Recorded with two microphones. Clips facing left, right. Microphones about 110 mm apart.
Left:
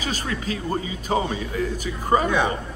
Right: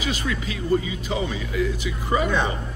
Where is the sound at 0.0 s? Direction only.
40° left (ahead or behind).